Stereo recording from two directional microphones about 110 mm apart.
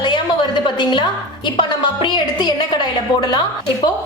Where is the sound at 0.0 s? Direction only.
45° left (ahead or behind).